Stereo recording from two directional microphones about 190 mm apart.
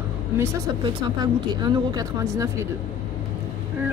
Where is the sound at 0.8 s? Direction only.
25° right (ahead or behind).